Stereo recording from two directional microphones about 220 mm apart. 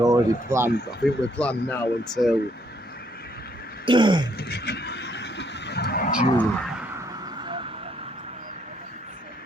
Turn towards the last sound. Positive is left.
turn(degrees=-20)  # may be behind; listen again after turning